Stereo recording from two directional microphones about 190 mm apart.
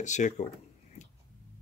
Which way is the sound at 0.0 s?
40° left (ahead or behind).